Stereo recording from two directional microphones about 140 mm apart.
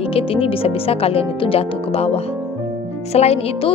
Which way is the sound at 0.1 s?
40° left (ahead or behind).